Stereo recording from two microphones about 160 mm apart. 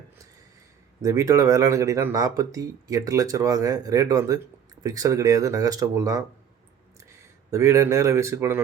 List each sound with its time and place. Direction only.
1.0 s speech: 20° right (ahead or behind)
7.5 s speech: 20° right (ahead or behind)